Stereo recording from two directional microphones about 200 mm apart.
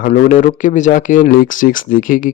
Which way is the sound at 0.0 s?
40° left (ahead or behind).